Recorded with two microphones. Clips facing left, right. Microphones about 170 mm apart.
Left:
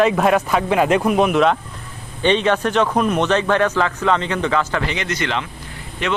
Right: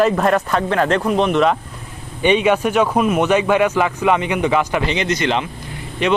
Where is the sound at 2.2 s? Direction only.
10° right (ahead or behind).